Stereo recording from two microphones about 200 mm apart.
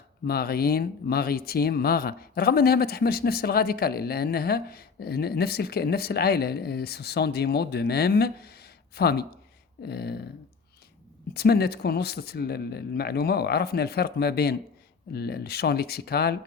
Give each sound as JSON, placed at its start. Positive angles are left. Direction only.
{"t": 0.3, "sound": "speech", "side_deg": 50}
{"t": 11.3, "sound": "speech", "side_deg": 55}